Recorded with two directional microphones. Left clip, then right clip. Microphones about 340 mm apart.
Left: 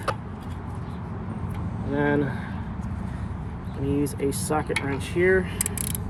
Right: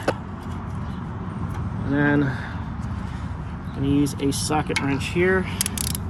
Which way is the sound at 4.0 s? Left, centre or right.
Right.